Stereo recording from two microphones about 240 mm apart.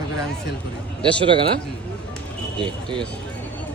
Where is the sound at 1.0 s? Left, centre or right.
Right.